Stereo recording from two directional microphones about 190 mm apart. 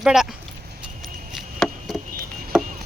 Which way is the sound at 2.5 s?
5° right (ahead or behind).